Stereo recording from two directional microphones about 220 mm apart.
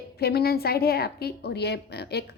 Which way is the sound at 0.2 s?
45° left (ahead or behind).